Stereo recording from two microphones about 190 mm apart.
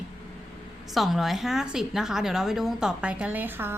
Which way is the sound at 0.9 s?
Centre (ahead or behind).